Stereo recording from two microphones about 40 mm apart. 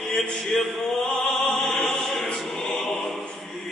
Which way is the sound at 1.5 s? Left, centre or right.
Centre.